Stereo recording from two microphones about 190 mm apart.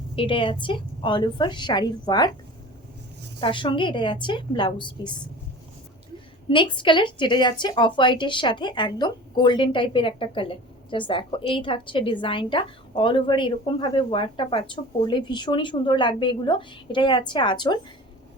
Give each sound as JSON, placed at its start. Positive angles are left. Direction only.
{"t": 0.2, "sound": "a woman's voice", "side_deg": 25}
{"t": 3.4, "sound": "a woman's voice", "side_deg": 25}
{"t": 6.5, "sound": "a woman's voice", "side_deg": 25}